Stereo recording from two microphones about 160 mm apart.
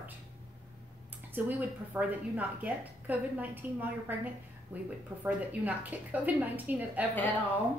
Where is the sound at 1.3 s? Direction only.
10° right (ahead or behind).